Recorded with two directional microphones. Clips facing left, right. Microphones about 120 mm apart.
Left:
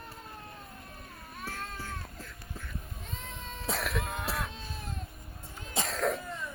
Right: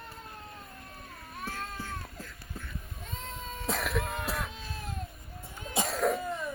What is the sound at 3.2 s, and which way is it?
Cough, centre (ahead or behind).